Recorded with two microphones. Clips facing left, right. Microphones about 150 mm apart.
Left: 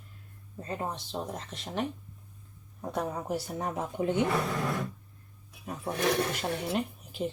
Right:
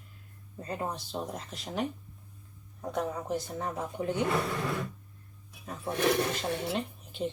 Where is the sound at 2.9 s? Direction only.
5° left (ahead or behind).